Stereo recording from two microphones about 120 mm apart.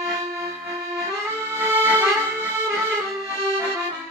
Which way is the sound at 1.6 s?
15° right (ahead or behind).